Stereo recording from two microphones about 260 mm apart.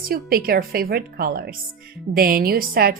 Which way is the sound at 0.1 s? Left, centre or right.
Right.